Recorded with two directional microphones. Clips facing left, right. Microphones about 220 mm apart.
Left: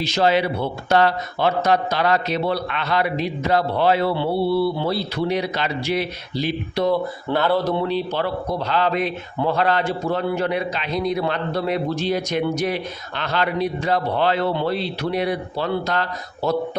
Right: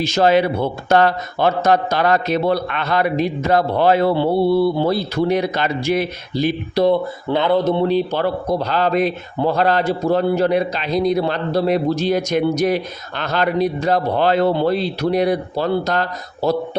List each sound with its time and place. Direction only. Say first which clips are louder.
0.0 s a man's voice: right 4 dB; 45° right (ahead or behind)
7.3 s speech: right 4 dB; 20° right (ahead or behind)
7.9 s a man's voice: right 5 dB; 45° right (ahead or behind)